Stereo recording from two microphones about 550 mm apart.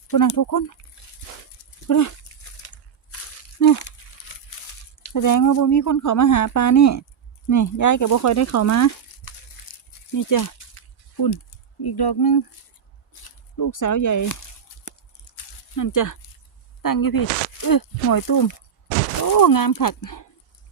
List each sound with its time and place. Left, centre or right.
0.1 s speech: left
1.9 s speech: left
2.6 s a sound: left
5.0 s speech: left
9.6 s a sound: left
10.1 s speech: left
14.8 s biting: left
15.7 s speech: left